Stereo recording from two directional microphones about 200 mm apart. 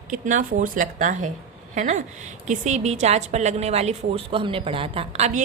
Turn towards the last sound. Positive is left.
turn(degrees=-35)  # may be behind; listen again after turning